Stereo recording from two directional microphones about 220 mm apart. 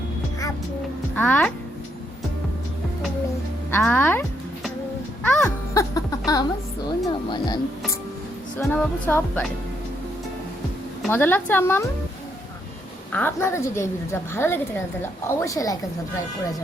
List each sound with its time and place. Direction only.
1.1 s speech: 5° left (ahead or behind)
3.7 s music: 10° left (ahead or behind)
5.7 s a sound: 15° left (ahead or behind)
7.1 s speech: 20° left (ahead or behind)
8.5 s a woman's voice: 10° left (ahead or behind)
11.1 s a woman's voice: 10° left (ahead or behind)
13.1 s a woman's voice: 10° left (ahead or behind)